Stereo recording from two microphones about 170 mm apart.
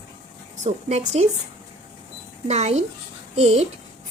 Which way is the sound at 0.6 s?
40° right (ahead or behind).